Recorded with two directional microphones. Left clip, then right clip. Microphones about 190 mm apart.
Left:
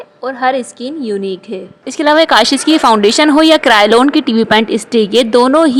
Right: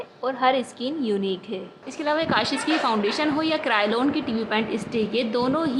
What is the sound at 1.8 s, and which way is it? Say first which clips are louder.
Speech: left 15 dB; 45° left (ahead or behind).